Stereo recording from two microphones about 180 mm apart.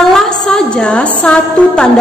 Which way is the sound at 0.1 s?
5° left (ahead or behind).